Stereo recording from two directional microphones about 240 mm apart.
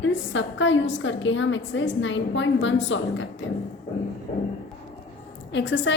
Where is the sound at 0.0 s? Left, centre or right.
Left.